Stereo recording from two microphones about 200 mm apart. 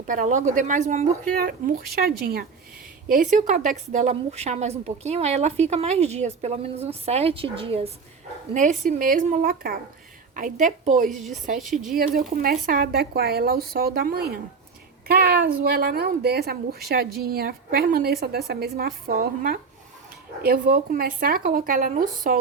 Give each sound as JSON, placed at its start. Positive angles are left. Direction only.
{"t": 0.1, "sound": "a woman's voice", "side_deg": -40}
{"t": 8.8, "sound": "a woman's voice", "side_deg": -40}